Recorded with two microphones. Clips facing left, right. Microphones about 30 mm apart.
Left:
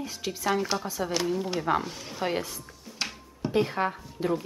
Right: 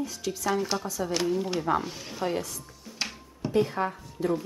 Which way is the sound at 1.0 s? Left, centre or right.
Centre.